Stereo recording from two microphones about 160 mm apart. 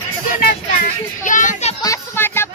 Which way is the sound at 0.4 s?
70° left (ahead or behind).